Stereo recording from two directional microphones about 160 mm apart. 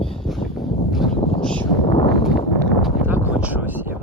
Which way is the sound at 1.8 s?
40° left (ahead or behind).